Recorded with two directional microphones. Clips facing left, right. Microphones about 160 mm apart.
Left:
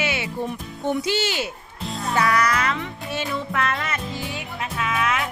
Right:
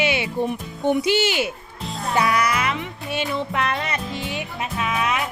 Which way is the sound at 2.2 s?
15° right (ahead or behind).